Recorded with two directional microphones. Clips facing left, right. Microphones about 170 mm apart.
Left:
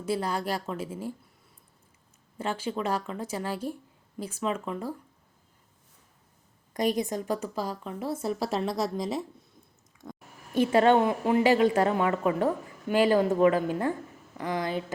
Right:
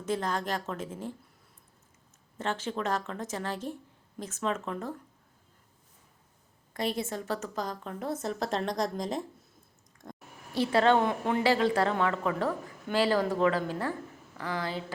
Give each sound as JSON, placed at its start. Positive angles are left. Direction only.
{"t": 0.0, "sound": "a woman's voice", "side_deg": 10}
{"t": 2.4, "sound": "a woman's voice", "side_deg": 10}
{"t": 6.7, "sound": "a woman's voice", "side_deg": 15}
{"t": 10.0, "sound": "a sound", "side_deg": 0}
{"t": 10.5, "sound": "a woman's voice", "side_deg": 15}